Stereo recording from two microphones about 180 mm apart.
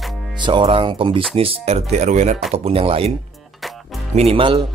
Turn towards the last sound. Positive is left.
turn(degrees=-30)  # may be behind; listen again after turning